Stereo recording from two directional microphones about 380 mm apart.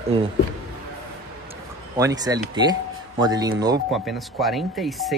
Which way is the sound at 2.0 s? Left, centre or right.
Centre.